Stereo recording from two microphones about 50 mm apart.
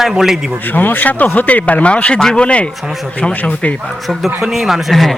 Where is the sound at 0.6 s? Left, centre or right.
Left.